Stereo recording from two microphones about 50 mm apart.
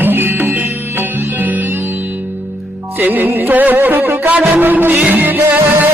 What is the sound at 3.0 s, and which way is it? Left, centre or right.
Music, right.